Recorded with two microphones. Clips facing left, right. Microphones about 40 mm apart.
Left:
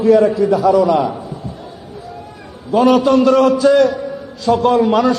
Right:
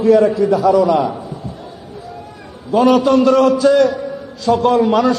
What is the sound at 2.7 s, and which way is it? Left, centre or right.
A man's voice, centre.